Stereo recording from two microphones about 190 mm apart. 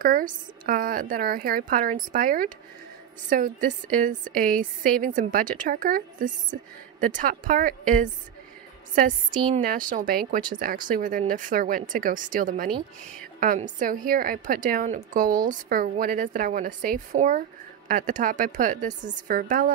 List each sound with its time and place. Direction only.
0.0 s a woman's voice: 45° right (ahead or behind)
9.3 s a woman's voice: 25° right (ahead or behind)
9.6 s a woman's voice: 45° right (ahead or behind)